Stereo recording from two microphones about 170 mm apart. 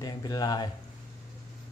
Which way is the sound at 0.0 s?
20° left (ahead or behind).